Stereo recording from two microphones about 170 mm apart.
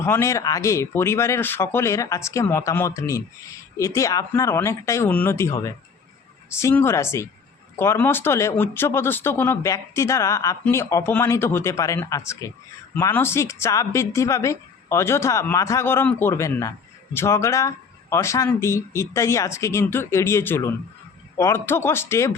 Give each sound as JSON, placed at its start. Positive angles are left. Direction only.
{"t": 0.0, "sound": "speech", "side_deg": 15}